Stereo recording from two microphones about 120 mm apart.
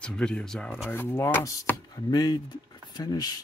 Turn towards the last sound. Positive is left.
turn(degrees=30)  # may be behind; listen again after turning